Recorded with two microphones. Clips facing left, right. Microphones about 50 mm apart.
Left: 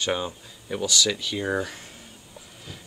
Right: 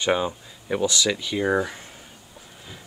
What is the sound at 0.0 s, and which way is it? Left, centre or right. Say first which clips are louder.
Speech: right 4 dB; centre.